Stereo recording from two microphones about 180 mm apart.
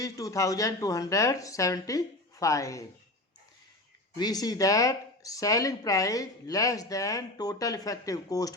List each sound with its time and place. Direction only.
0.0 s speech: 20° left (ahead or behind)
4.2 s speech: 20° left (ahead or behind)